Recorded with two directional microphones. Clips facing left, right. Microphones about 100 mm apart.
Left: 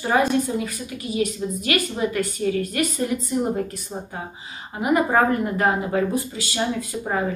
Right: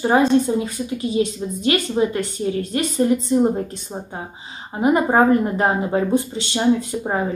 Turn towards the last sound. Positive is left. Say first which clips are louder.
# right 7 dB
turn(degrees=-25)  # may be behind; listen again after turning